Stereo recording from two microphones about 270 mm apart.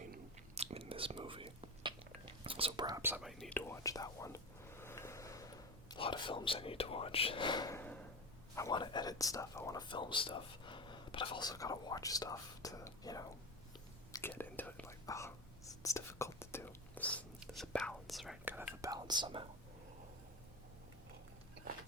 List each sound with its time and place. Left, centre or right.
0.1 s whispering: right; by 5.5 s centre
5.9 s speech: centre
14.1 s whispering: centre